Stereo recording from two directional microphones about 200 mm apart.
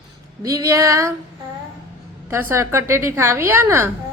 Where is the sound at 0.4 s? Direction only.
15° right (ahead or behind).